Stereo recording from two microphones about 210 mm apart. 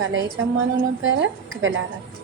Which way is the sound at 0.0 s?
70° right (ahead or behind).